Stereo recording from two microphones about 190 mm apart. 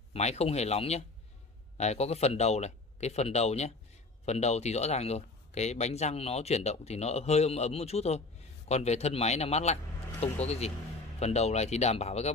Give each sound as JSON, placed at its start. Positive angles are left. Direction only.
{"t": 0.1, "sound": "speech", "side_deg": 35}